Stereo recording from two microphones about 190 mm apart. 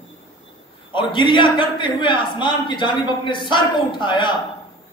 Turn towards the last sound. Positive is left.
turn(degrees=25)  # may be behind; listen again after turning